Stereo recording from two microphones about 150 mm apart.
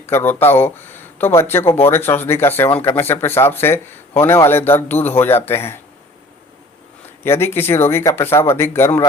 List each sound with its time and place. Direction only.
0.0 s a man's voice: 15° left (ahead or behind)
7.3 s a man's voice: 15° left (ahead or behind)